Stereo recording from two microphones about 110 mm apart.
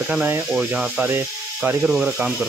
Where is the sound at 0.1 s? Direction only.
15° right (ahead or behind).